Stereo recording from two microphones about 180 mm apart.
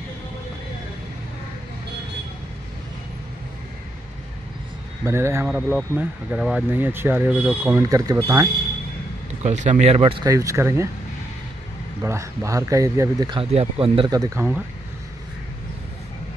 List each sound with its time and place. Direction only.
5.0 s speech: 15° right (ahead or behind)
5.5 s speech: 5° right (ahead or behind); by 8.5 s 20° right (ahead or behind)
9.4 s speech: 40° right (ahead or behind)
10.2 s speech: 15° right (ahead or behind)
12.0 s speech: 15° right (ahead or behind)